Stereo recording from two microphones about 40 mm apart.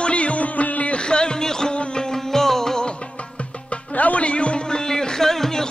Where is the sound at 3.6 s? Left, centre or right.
Left; by 5.7 s centre.